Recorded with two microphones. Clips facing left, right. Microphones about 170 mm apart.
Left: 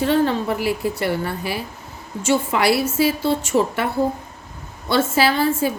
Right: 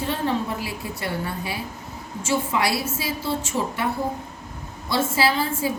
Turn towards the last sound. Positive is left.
turn(degrees=70)  # may be behind; listen again after turning